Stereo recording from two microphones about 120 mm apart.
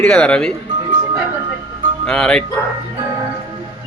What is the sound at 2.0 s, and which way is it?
Speech, 5° left (ahead or behind).